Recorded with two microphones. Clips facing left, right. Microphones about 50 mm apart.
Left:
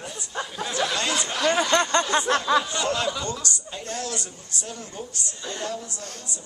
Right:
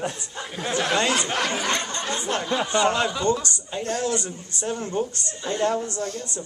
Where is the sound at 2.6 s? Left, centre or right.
Right.